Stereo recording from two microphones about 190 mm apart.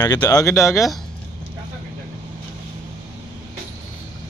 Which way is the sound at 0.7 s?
Centre (ahead or behind).